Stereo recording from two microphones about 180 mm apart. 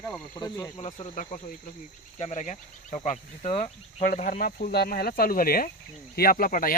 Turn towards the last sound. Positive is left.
turn(degrees=50)  # may be behind; listen again after turning